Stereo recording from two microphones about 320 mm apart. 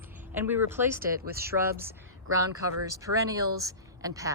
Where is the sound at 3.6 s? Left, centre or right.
Centre.